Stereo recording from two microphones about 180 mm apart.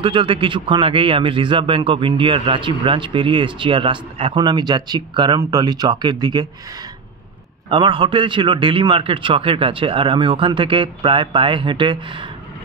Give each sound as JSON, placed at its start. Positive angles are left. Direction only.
{"t": 0.0, "sound": "a man's voice", "side_deg": -30}
{"t": 7.7, "sound": "a man's voice", "side_deg": -25}